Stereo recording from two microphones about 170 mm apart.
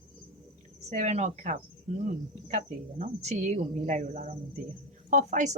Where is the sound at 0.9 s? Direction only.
45° right (ahead or behind).